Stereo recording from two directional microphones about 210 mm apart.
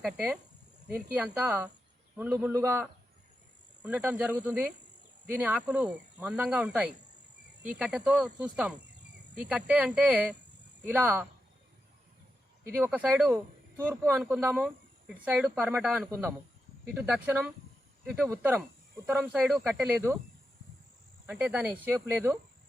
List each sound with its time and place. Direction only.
0.0 s cricket: 5° right (ahead or behind)
0.9 s speech: 5° right (ahead or behind)
7.6 s cricket: 5° right (ahead or behind)
10.8 s speech: 10° right (ahead or behind)
12.6 s speech: 10° right (ahead or behind)
21.2 s speech: 5° right (ahead or behind)